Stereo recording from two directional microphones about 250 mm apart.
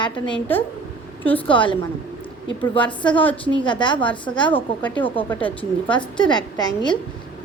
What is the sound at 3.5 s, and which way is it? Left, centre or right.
Speech, centre.